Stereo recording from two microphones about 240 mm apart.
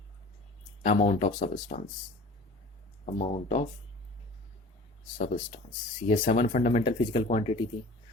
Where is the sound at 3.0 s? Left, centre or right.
Left.